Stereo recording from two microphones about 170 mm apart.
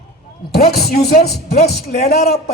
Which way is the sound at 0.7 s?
65° left (ahead or behind).